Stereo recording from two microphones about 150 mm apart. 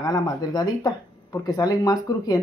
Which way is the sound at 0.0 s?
25° left (ahead or behind).